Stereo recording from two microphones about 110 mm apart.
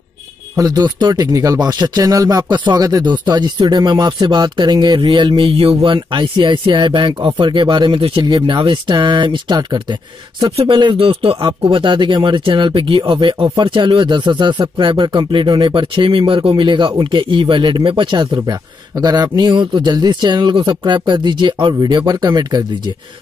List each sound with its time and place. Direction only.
0.6 s speech: 35° right (ahead or behind)
5.5 s speech: 60° right (ahead or behind)
11.4 s speech: 45° right (ahead or behind)